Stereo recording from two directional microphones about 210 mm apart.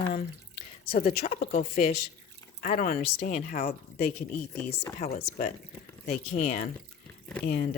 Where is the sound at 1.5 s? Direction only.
40° left (ahead or behind).